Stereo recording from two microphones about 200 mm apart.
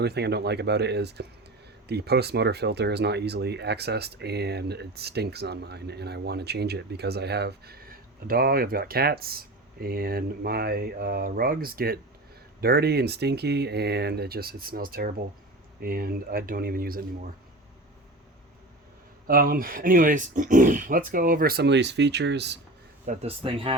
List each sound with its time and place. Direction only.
0.0 s speech: 55° right (ahead or behind)
19.3 s speech: 45° right (ahead or behind)
23.0 s speech: 30° right (ahead or behind)